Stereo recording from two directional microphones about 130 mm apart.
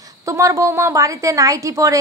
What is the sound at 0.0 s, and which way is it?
Speech, 25° right (ahead or behind).